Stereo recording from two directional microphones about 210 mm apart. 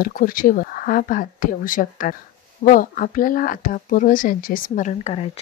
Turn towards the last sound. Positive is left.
turn(degrees=30)  # may be behind; listen again after turning